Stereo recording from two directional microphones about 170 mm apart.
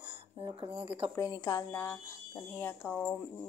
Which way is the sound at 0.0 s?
30° right (ahead or behind).